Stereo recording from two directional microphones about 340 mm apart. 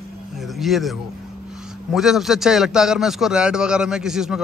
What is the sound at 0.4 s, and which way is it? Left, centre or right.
A man's voice, centre.